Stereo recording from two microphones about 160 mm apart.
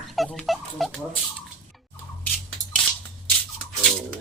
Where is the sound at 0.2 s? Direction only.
Centre (ahead or behind).